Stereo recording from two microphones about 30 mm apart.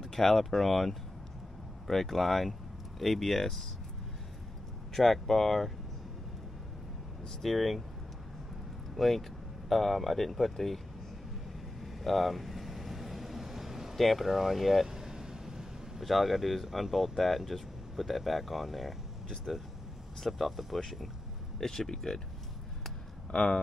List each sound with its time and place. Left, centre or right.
0.0 s speech: centre
4.9 s speech: centre
7.4 s speech: centre
8.9 s speech: centre
11.8 s vehicle: centre
13.9 s speech: centre
14.9 s vehicle: centre
16.0 s speech: centre
20.2 s speech: centre
21.5 s speech: centre
23.3 s speech: left